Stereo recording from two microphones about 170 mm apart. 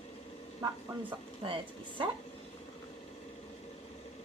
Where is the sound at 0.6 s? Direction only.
25° right (ahead or behind).